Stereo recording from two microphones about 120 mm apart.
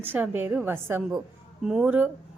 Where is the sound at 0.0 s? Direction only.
15° right (ahead or behind).